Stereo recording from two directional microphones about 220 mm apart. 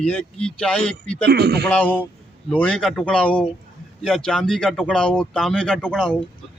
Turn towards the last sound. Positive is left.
turn(degrees=5)  # may be behind; listen again after turning